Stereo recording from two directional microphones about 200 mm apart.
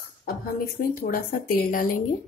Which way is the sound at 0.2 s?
50° left (ahead or behind).